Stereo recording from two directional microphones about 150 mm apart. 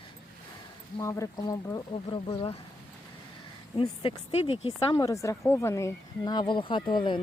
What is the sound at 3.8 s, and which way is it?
Speech, 35° left (ahead or behind).